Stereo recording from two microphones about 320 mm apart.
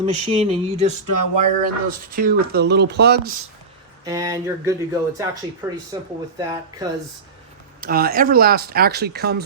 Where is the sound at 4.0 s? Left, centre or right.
Centre.